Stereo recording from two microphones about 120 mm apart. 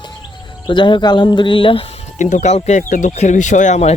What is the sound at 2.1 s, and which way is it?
Speech, 85° left.